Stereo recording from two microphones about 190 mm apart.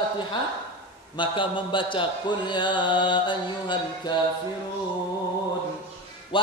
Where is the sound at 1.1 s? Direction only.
25° left (ahead or behind).